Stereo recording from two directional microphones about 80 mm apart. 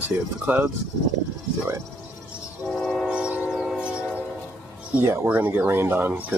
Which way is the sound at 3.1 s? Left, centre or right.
Centre.